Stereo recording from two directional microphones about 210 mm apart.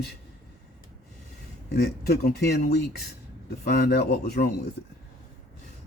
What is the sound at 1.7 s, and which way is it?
Speech, 50° left (ahead or behind).